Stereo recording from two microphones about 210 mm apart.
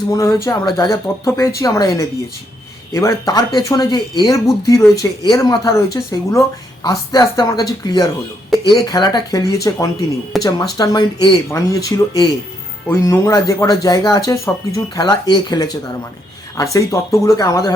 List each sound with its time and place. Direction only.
0.1 s speech: 15° left (ahead or behind)
8.4 s a sound: centre (ahead or behind)
8.9 s speech: 20° left (ahead or behind)